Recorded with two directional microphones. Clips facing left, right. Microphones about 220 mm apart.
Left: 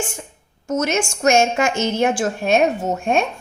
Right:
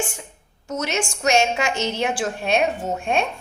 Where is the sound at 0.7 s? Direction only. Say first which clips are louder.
Left 5 dB; 45° left (ahead or behind).